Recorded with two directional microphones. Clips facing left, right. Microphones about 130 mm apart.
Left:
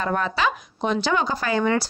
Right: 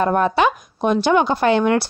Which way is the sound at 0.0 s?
55° right (ahead or behind).